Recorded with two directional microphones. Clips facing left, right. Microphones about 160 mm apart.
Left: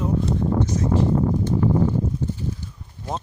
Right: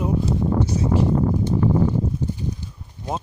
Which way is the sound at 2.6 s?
15° right (ahead or behind).